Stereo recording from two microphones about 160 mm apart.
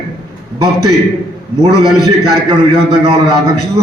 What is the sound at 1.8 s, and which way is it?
Speech, 20° left (ahead or behind).